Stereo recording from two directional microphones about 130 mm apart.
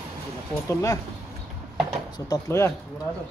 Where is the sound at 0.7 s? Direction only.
25° left (ahead or behind).